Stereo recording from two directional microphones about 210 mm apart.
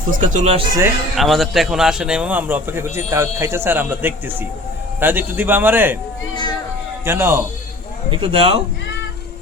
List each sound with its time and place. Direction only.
0.1 s speech: 35° right (ahead or behind)
1.1 s a man's voice: centre (ahead or behind)
6.3 s a sound: 20° left (ahead or behind)
7.0 s a man's voice: 10° right (ahead or behind)
8.1 s speech: 25° right (ahead or behind)